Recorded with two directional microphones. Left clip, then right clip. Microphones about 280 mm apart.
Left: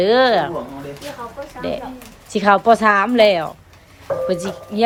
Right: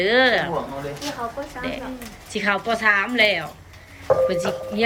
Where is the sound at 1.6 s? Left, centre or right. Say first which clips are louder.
Left 9 dB; centre.